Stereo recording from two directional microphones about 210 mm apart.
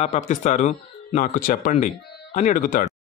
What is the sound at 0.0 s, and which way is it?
Speech, 35° left (ahead or behind).